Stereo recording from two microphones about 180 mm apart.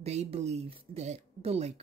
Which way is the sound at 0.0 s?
35° right (ahead or behind).